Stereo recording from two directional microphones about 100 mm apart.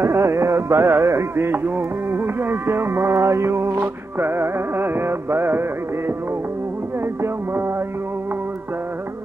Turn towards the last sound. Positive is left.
turn(degrees=-25)  # may be behind; listen again after turning